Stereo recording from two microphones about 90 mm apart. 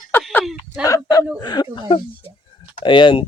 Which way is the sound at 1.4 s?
50° left (ahead or behind).